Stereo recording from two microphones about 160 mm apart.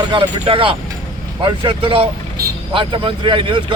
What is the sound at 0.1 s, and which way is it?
Speech, 30° right (ahead or behind).